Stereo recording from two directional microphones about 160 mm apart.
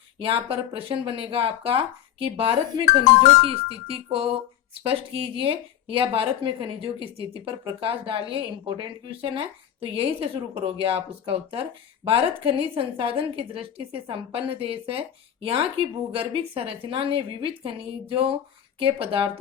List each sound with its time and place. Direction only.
0.2 s speech: 35° right (ahead or behind)